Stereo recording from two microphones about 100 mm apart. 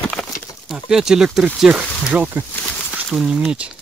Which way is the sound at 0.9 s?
5° right (ahead or behind).